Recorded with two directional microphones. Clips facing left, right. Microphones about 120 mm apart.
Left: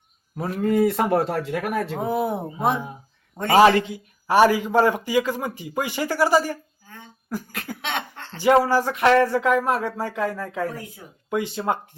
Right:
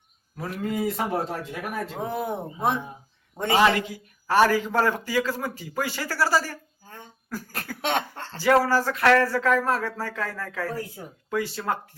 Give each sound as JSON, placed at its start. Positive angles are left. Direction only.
{"t": 0.3, "sound": "speech", "side_deg": 30}
{"t": 0.6, "sound": "speech", "side_deg": 55}
{"t": 2.0, "sound": "speech", "side_deg": 10}
{"t": 3.5, "sound": "speech", "side_deg": 35}
{"t": 4.3, "sound": "speech", "side_deg": 15}
{"t": 7.8, "sound": "cough", "side_deg": -45}
{"t": 8.4, "sound": "speech", "side_deg": 20}